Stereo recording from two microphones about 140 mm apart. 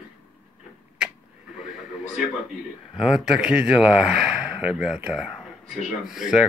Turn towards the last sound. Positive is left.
turn(degrees=0)  # may be behind; listen again after turning